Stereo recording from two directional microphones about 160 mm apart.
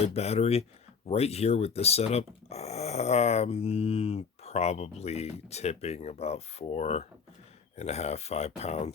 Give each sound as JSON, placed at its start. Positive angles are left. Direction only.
{"t": 0.0, "sound": "speech", "side_deg": 40}